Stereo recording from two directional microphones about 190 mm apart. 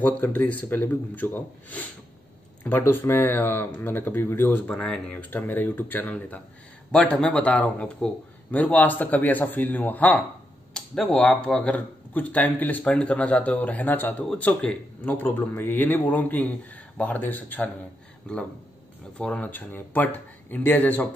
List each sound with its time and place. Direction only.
0.0 s speech: 10° left (ahead or behind)
19.1 s speech: 5° left (ahead or behind)